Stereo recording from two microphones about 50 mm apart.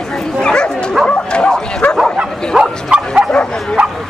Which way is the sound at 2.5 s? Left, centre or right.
Centre.